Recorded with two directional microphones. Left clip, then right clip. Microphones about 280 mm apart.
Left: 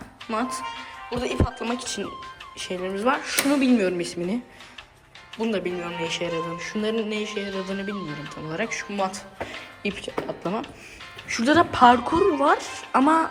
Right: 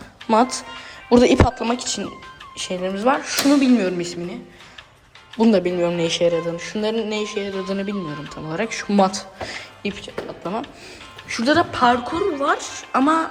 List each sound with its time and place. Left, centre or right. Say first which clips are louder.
0.3 s speech: right 9 dB; centre
1.6 s a woman's voice: right 5 dB; centre
5.4 s a woman's voice: right 9 dB; centre